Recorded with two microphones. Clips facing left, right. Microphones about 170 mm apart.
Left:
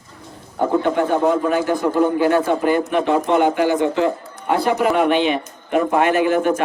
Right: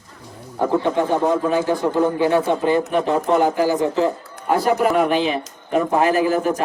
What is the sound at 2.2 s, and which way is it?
Speech, 25° right (ahead or behind).